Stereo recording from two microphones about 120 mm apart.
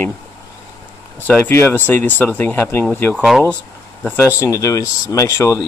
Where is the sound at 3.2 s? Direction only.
5° right (ahead or behind).